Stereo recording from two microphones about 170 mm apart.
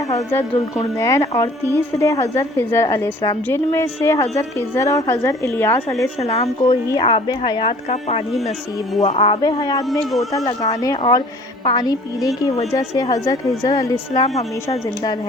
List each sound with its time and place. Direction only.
0.1 s speech: 20° left (ahead or behind)
6.2 s speech: 40° left (ahead or behind)
7.0 s a woman's voice: 25° left (ahead or behind)
9.0 s a woman's voice: 35° left (ahead or behind)
9.9 s speech: centre (ahead or behind)
10.3 s a woman's voice: 20° left (ahead or behind)